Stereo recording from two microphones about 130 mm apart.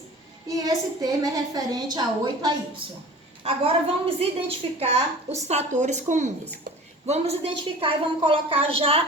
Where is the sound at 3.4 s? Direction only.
50° right (ahead or behind).